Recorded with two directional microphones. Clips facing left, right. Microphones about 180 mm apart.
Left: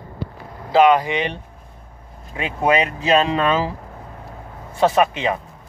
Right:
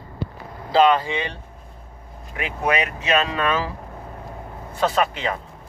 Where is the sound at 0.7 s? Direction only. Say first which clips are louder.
Left 3 dB; 15° left (ahead or behind).